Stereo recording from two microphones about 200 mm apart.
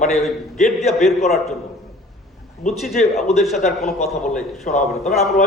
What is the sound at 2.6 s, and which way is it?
Speech, centre (ahead or behind).